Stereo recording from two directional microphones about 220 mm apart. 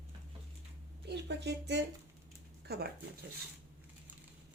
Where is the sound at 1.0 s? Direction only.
50° right (ahead or behind).